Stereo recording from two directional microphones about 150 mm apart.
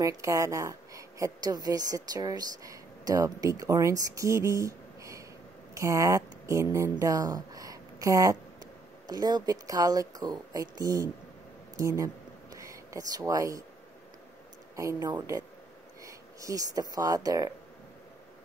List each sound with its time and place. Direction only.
0.0 s a woman's voice: 20° right (ahead or behind)
11.7 s a sound: 20° right (ahead or behind)
14.8 s a woman's voice: 20° right (ahead or behind)